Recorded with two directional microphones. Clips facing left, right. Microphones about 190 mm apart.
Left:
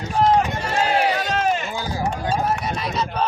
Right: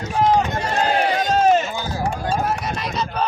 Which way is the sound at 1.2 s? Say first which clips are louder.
Right 6 dB; 40° right (ahead or behind).